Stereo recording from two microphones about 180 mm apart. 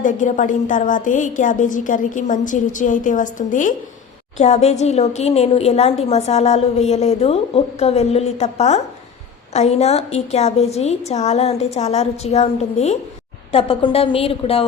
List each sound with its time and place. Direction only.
0.0 s a woman's voice: 45° left (ahead or behind)